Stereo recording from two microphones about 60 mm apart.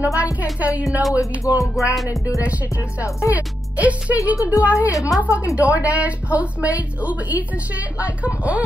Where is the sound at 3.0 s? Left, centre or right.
Left.